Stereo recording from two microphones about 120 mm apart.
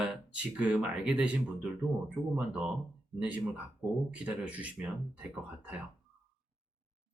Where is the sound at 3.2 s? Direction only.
10° right (ahead or behind).